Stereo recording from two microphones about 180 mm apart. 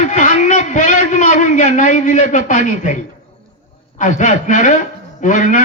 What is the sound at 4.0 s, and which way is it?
A man's voice, 45° left (ahead or behind).